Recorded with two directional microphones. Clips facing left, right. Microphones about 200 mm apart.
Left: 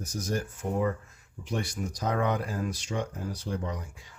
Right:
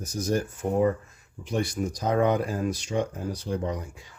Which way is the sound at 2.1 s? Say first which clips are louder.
Right 6 dB; 25° right (ahead or behind).